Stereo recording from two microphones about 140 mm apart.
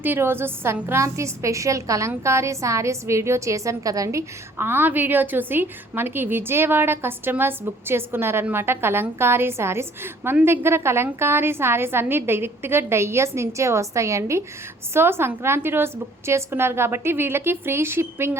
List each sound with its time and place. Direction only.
0.0 s a woman's voice: 15° right (ahead or behind)